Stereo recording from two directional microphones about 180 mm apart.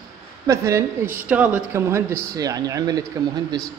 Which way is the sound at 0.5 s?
15° right (ahead or behind).